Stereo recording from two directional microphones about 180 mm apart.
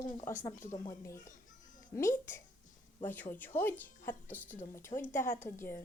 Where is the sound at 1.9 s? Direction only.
15° left (ahead or behind).